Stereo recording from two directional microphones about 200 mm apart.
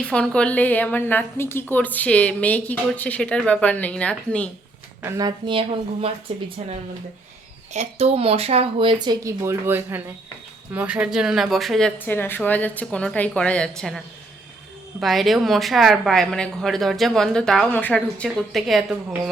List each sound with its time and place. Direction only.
0.0 s a woman's voice: 5° left (ahead or behind)
5.0 s speech: 20° right (ahead or behind)
7.7 s speech: 30° right (ahead or behind); by 14.0 s centre (ahead or behind)
15.0 s speech: centre (ahead or behind)